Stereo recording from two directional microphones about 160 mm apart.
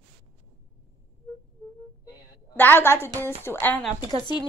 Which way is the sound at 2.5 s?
10° left (ahead or behind).